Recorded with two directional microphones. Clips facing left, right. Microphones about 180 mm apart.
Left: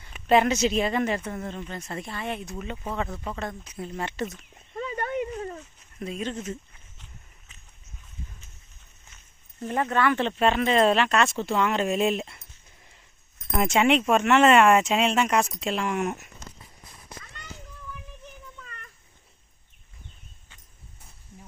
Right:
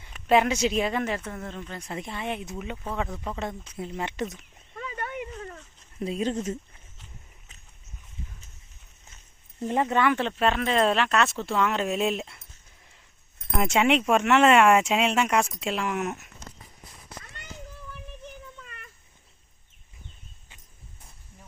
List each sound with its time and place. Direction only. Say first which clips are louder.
0.3 s speech: left 1 dB; 10° right (ahead or behind)
1.7 s speech: even; 10° right (ahead or behind)
3.8 s speech: even; 15° right (ahead or behind)
4.8 s a sound: left 6 dB; 35° left (ahead or behind)
6.0 s speech: right 4 dB; 30° right (ahead or behind)
9.6 s speech: right 1 dB; 20° right (ahead or behind); by 12.4 s centre (ahead or behind)
13.6 s speech: left 1 dB; 5° right (ahead or behind)